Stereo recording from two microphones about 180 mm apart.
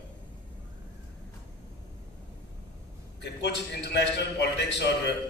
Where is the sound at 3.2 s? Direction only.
70° left (ahead or behind).